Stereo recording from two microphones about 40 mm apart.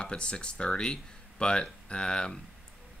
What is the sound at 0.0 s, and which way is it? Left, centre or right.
Speech, left.